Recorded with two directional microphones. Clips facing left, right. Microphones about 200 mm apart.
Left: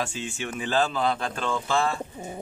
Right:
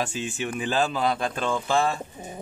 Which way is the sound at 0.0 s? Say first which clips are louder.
Right 2 dB; 15° right (ahead or behind).